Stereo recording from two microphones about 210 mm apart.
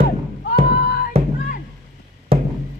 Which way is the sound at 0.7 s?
50° left (ahead or behind).